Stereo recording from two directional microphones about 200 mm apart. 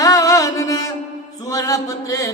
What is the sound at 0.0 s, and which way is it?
Music, 15° left (ahead or behind).